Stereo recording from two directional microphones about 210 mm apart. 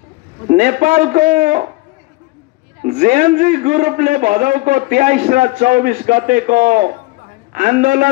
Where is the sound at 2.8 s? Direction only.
35° right (ahead or behind).